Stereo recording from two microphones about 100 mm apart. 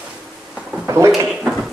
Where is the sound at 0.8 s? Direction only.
30° right (ahead or behind).